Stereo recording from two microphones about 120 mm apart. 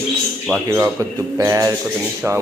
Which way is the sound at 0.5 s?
25° right (ahead or behind).